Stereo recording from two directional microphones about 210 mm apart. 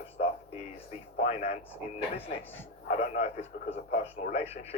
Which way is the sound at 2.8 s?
35° left (ahead or behind).